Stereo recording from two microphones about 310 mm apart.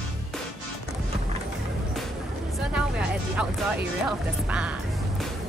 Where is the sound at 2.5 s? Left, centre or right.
Centre.